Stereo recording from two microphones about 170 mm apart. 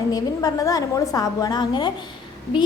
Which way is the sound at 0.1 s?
20° left (ahead or behind).